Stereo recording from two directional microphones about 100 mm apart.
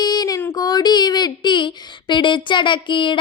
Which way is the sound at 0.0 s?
40° left (ahead or behind).